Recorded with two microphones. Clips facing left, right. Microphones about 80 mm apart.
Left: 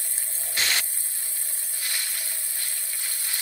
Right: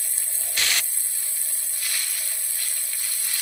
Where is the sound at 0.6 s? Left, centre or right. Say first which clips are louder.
Even; left.